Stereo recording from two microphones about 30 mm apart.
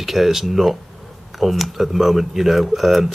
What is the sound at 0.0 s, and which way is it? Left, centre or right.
Speech, centre.